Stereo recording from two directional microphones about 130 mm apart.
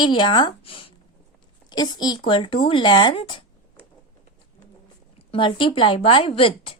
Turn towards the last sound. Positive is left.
turn(degrees=45)  # may be behind; listen again after turning